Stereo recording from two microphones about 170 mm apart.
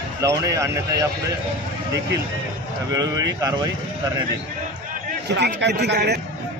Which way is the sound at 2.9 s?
20° right (ahead or behind).